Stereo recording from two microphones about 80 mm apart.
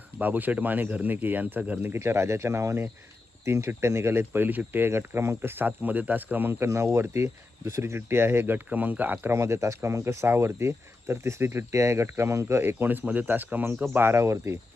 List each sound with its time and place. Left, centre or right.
0.2 s speech: right
1.9 s speech: right
9.3 s speech: right